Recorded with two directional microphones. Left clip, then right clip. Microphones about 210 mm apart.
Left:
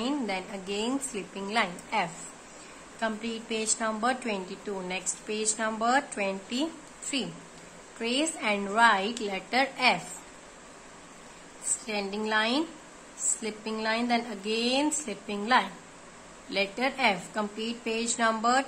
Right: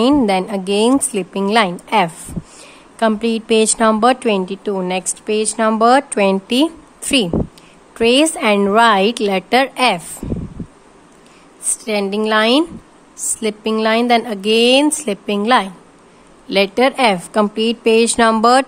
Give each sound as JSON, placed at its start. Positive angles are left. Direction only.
{"t": 0.0, "sound": "a woman's voice", "side_deg": -55}
{"t": 11.8, "sound": "a woman's voice", "side_deg": -50}